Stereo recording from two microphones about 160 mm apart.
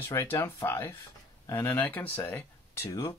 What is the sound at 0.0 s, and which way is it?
Speech, 15° left (ahead or behind).